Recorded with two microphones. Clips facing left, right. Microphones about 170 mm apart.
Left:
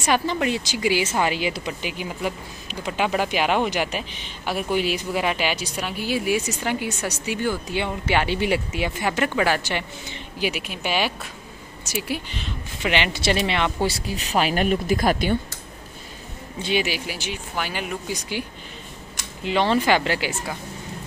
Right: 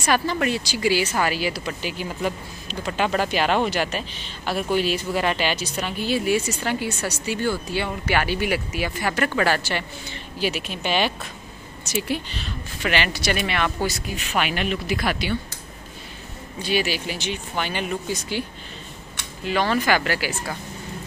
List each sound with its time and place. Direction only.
0.0 s speech: 15° left (ahead or behind); by 15.3 s 45° left (ahead or behind)
16.6 s speech: 20° left (ahead or behind)
19.4 s speech: 25° left (ahead or behind)